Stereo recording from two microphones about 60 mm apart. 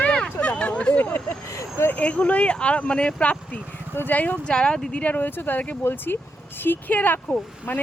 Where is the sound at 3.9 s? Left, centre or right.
Left.